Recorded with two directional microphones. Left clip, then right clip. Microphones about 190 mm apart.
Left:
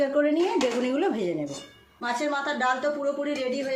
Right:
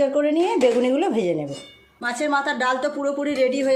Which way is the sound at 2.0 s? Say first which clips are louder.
Right 5 dB; 35° right (ahead or behind).